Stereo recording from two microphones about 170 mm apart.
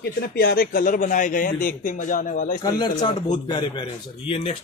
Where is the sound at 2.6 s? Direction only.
25° left (ahead or behind).